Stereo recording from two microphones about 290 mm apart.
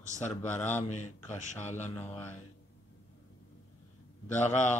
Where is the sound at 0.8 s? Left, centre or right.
Left.